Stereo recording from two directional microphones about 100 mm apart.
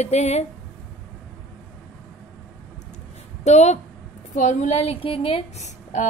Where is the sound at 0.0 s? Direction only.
90° left.